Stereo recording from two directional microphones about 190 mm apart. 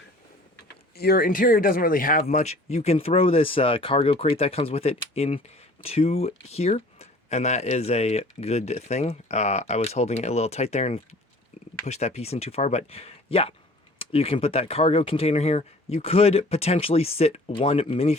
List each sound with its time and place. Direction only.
0.9 s speech: 55° left (ahead or behind); by 18.2 s 35° left (ahead or behind)